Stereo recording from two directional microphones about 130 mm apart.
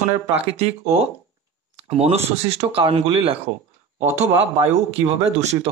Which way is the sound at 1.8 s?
55° right (ahead or behind).